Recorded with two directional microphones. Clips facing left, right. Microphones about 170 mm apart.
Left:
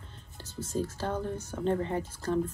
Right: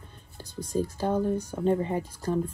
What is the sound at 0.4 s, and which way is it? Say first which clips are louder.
Speech: right 4 dB; 15° right (ahead or behind).